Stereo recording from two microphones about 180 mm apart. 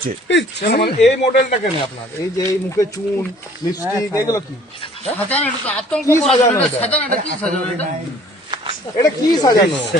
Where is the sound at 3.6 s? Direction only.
20° left (ahead or behind).